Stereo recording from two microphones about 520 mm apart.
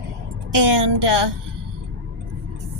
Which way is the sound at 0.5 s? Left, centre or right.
Right.